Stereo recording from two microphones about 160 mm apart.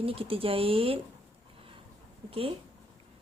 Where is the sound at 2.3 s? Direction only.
35° right (ahead or behind).